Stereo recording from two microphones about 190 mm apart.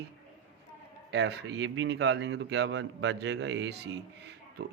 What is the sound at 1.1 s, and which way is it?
Speech, 65° right (ahead or behind).